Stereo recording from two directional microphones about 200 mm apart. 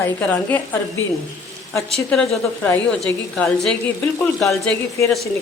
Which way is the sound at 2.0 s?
5° left (ahead or behind).